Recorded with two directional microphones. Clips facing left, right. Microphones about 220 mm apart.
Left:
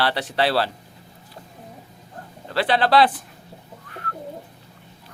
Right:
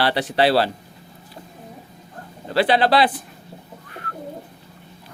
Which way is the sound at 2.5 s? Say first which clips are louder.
Right 1 dB; 5° right (ahead or behind).